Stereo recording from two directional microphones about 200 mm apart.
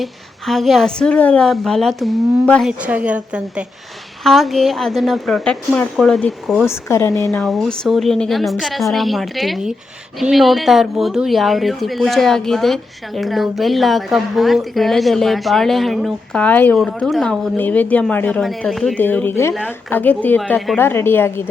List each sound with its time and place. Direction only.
0.0 s speech: centre (ahead or behind)
6.7 s a woman's voice: 15° left (ahead or behind)
7.4 s a woman's voice: centre (ahead or behind)
20.7 s a woman's voice: 10° left (ahead or behind)